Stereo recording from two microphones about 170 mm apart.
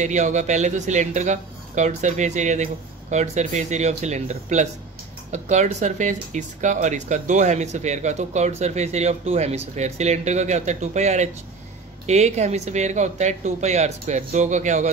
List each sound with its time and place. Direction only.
0.0 s speech: 45° right (ahead or behind)